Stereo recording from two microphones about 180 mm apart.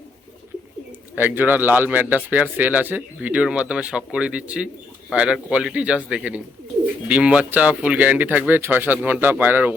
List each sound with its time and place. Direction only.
1.1 s speech: 10° right (ahead or behind)